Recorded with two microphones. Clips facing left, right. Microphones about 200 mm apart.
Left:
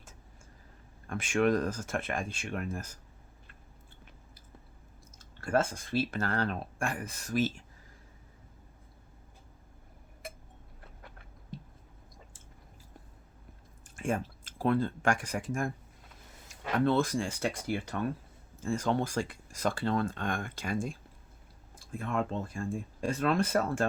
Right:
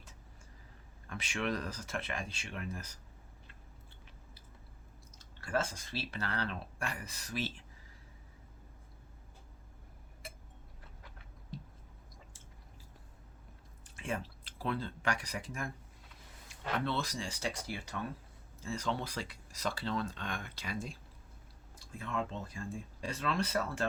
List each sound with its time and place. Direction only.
1.0 s speech: 50° left (ahead or behind)
5.1 s speech: 50° left (ahead or behind)
13.8 s speech: 45° left (ahead or behind)